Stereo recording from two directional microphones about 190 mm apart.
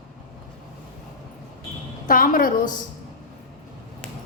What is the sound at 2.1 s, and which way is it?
Speech, 45° left (ahead or behind).